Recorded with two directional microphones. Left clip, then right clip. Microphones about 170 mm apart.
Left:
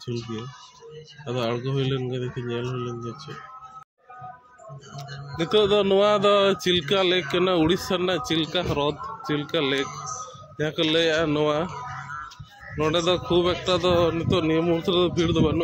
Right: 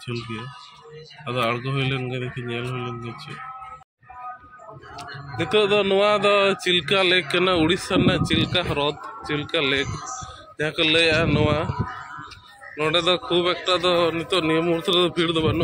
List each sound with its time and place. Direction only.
1.2 s speech: 5° left (ahead or behind)
4.9 s speech: 10° left (ahead or behind)
9.8 s a man's voice: 60° right (ahead or behind)
10.6 s speech: 10° left (ahead or behind)
12.7 s speech: 15° left (ahead or behind)